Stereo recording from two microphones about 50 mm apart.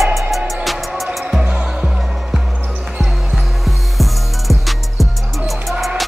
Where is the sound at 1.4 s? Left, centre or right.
Centre.